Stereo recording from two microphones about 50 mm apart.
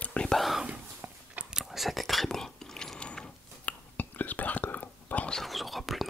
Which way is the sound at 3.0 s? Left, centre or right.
Centre.